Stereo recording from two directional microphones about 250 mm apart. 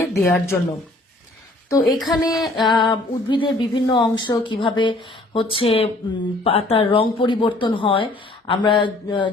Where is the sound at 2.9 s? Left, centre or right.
Centre.